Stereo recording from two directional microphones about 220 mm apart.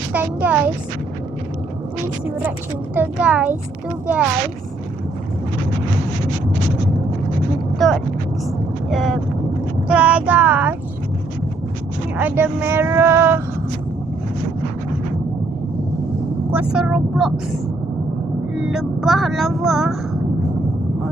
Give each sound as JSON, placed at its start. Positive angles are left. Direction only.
{"t": 0.1, "sound": "speech", "side_deg": -5}
{"t": 2.9, "sound": "a woman's voice", "side_deg": -5}
{"t": 7.8, "sound": "a woman's voice", "side_deg": 0}
{"t": 12.1, "sound": "speech", "side_deg": -10}
{"t": 16.5, "sound": "a woman's voice", "side_deg": -5}